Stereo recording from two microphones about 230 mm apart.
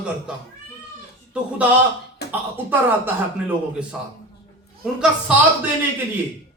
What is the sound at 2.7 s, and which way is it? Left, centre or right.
Speech, centre.